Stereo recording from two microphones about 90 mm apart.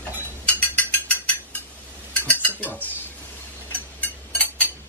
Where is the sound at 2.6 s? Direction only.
20° left (ahead or behind).